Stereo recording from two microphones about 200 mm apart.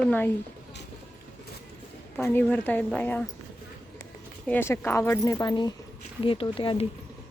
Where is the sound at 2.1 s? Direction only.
10° left (ahead or behind).